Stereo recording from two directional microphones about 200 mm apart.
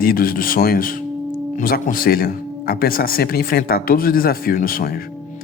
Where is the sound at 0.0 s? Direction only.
45° left (ahead or behind).